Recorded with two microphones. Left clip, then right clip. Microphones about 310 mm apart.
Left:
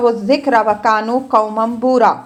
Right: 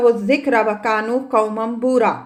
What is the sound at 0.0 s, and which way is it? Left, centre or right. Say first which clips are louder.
A woman's voice: left 1 dB; centre.